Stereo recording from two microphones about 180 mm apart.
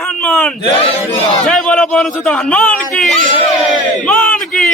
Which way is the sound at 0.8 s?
30° left (ahead or behind).